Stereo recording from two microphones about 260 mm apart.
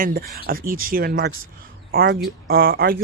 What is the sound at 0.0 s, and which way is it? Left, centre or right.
A man's voice, right.